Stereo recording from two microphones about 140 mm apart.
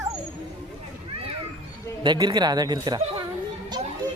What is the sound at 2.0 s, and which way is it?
Speech, 30° right (ahead or behind).